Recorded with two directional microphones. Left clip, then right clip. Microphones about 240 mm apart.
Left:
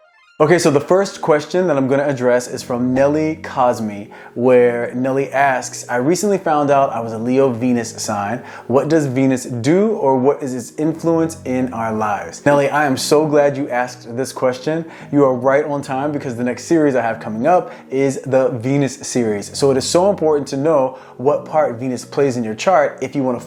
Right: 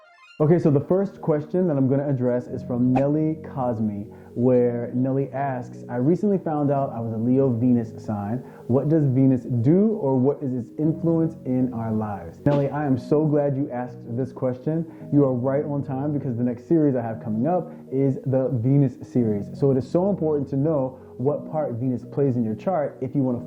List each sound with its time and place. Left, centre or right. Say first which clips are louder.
0.3 s speech: left 8 dB; centre
9.9 s speech: left 8 dB; centre
10.4 s speech: left 6 dB; centre
10.8 s speech: left 7 dB; centre